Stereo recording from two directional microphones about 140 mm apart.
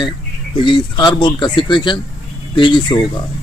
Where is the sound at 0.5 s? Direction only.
35° left (ahead or behind).